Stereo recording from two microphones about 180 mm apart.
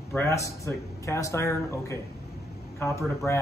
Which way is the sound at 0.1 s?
15° left (ahead or behind).